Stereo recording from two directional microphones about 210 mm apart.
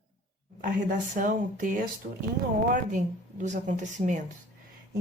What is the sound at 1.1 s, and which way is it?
Speech, 40° right (ahead or behind).